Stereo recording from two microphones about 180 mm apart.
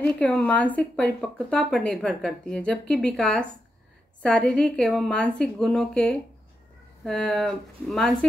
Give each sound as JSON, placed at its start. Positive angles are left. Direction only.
{"t": 0.0, "sound": "a woman's voice", "side_deg": 5}